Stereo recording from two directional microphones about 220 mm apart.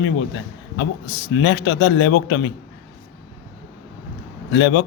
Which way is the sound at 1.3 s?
60° left (ahead or behind).